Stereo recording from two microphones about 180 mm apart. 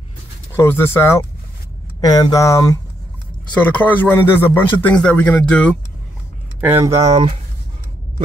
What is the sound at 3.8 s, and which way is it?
Speech, 10° left (ahead or behind).